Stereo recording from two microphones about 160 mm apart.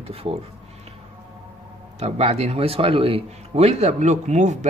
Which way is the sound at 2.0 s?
40° right (ahead or behind).